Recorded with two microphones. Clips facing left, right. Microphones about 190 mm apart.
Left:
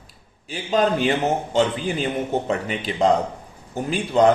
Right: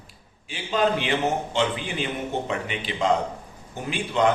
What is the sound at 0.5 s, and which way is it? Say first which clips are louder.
A man's voice: left 3 dB; 40° left (ahead or behind).